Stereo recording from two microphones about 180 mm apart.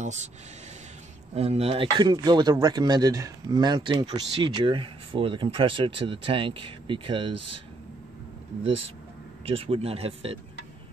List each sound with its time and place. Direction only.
1.3 s a man's voice: 35° right (ahead or behind)
9.5 s speech: 30° right (ahead or behind)